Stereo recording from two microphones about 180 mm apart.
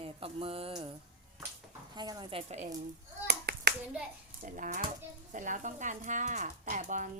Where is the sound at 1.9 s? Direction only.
25° right (ahead or behind).